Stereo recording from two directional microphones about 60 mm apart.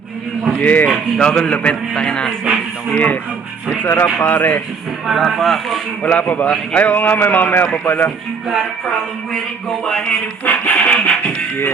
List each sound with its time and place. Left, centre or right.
0.6 s a man's voice: left
1.2 s speech: centre
2.4 s speech: centre
2.9 s a man's voice: left
3.8 s a man's voice: left
5.0 s speech: centre
6.0 s a man's voice: left
8.4 s a man's voice: centre